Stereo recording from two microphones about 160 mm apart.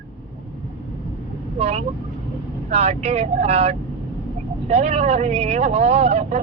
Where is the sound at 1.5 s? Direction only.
40° right (ahead or behind).